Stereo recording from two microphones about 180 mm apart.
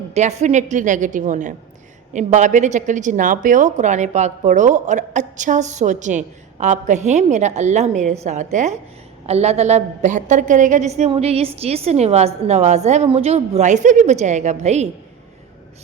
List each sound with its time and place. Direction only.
0.1 s a woman's voice: 40° right (ahead or behind)